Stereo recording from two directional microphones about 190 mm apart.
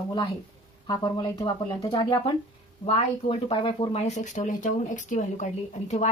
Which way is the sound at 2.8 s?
30° left (ahead or behind).